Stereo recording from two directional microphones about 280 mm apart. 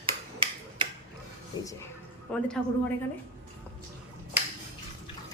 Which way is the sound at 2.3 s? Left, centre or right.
Centre.